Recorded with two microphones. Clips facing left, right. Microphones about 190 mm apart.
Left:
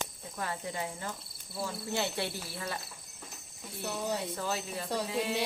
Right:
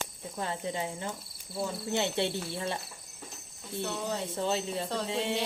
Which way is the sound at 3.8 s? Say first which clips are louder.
Right 1 dB; 10° left (ahead or behind).